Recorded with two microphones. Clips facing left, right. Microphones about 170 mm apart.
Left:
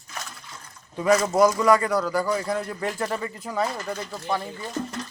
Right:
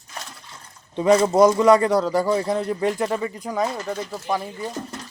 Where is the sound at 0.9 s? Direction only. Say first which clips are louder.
Right 4 dB; 25° right (ahead or behind); by 4.6 s 10° right (ahead or behind).